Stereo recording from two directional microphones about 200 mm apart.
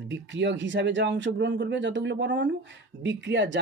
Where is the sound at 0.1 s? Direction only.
65° right (ahead or behind).